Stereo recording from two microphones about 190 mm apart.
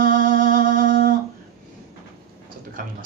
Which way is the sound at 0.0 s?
45° right (ahead or behind).